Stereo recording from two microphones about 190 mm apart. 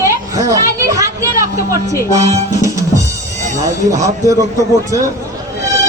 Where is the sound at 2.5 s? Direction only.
15° right (ahead or behind).